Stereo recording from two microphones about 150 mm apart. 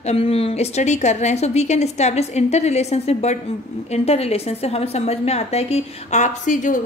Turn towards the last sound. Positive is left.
turn(degrees=60)  # may be behind; listen again after turning